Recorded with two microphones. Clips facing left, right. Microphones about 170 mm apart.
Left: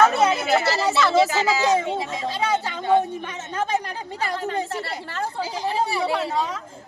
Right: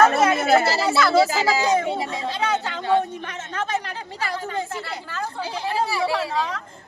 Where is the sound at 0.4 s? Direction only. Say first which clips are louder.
Right 3 dB; 45° right (ahead or behind).